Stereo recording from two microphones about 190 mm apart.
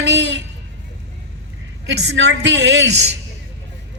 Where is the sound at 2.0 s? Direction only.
70° right (ahead or behind).